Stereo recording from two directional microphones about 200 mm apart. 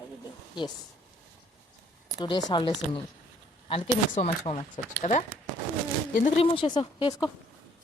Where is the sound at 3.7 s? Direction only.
35° left (ahead or behind).